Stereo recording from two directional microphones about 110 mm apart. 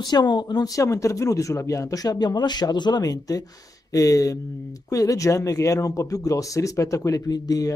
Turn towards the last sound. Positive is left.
turn(degrees=35)  # may be behind; listen again after turning